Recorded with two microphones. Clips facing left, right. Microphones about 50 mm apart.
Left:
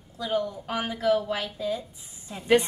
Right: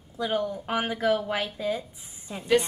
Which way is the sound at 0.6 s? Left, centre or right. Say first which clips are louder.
Even; right.